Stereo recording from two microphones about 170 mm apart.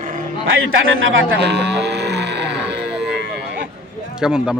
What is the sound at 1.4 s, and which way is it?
Cattle, 85° right.